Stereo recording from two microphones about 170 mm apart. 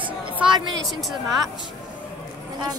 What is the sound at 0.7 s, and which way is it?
Speech, centre (ahead or behind).